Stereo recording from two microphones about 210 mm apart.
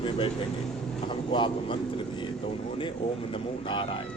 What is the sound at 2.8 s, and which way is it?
Speech, 25° left (ahead or behind).